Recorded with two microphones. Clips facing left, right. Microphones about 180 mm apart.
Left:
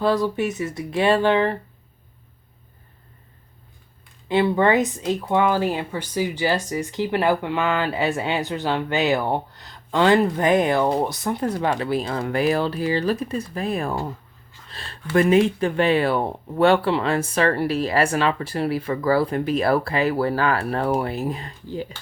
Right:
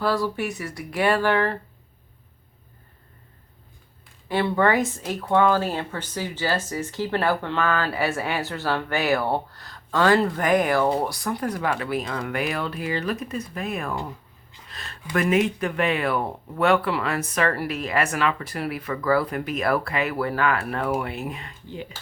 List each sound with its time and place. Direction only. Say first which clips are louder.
0.0 s speech: left 4 dB; 20° left (ahead or behind)
4.3 s speech: left 3 dB; 20° left (ahead or behind)
14.7 s a sound: left 2 dB; 30° left (ahead or behind)
15.1 s speech: left 5 dB; 30° left (ahead or behind)